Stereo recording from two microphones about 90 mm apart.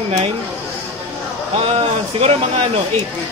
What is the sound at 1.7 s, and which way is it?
Speech, 90° right.